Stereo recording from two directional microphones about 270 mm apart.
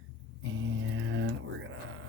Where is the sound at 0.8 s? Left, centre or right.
Right.